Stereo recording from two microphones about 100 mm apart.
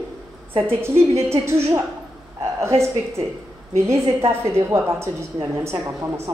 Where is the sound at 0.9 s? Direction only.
90° right.